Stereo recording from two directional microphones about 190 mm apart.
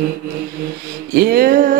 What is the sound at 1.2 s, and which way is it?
Music, 50° right (ahead or behind).